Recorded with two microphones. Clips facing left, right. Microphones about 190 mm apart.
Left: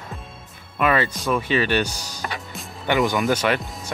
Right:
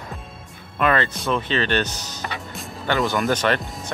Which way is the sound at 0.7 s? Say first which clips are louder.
Even; 5° left (ahead or behind).